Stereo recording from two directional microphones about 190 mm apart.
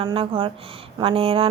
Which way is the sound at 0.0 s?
30° right (ahead or behind).